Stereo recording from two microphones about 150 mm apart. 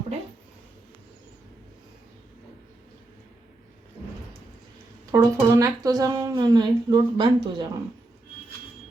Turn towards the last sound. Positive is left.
turn(degrees=-30)  # may be behind; listen again after turning